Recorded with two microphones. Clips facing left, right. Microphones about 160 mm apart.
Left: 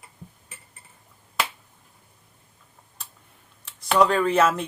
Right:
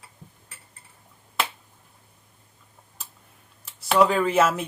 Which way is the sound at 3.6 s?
5° right (ahead or behind).